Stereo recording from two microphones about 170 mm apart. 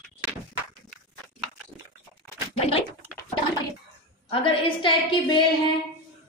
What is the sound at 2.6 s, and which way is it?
Speech, 35° left (ahead or behind).